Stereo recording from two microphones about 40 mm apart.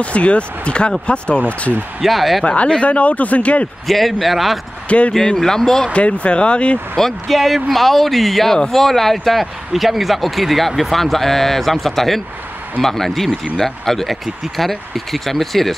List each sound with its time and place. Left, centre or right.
0.0 s speech: left
2.0 s speech: centre
2.4 s speech: left
3.8 s speech: centre
4.8 s speech: left
5.1 s speech: centre
5.9 s speech: left
7.0 s speech: centre